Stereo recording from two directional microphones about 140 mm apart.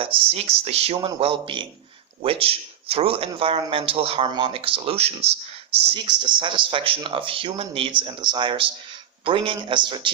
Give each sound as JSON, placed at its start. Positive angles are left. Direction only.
{"t": 0.0, "sound": "speech", "side_deg": -45}
{"t": 5.8, "sound": "speech", "side_deg": -35}